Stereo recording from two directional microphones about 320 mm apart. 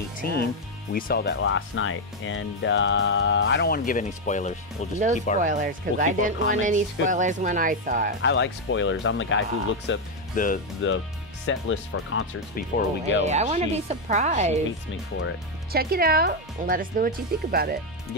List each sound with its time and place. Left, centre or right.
0.9 s speech: left
5.4 s speech: right
8.2 s speech: left
12.5 s speech: left
13.2 s speech: right
14.9 s speech: left
15.7 s speech: right